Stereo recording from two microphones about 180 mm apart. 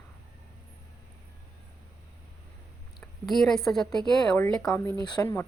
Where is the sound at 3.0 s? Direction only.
Centre (ahead or behind).